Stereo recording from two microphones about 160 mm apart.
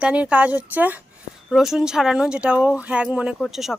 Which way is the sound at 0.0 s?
10° right (ahead or behind).